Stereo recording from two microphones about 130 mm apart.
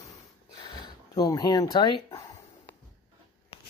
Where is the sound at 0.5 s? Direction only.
35° left (ahead or behind).